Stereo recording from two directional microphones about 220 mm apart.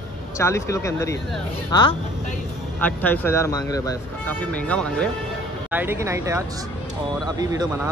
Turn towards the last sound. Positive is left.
turn(degrees=-15)  # may be behind; listen again after turning